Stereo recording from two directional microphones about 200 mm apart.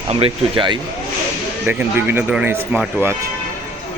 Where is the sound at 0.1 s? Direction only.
25° right (ahead or behind).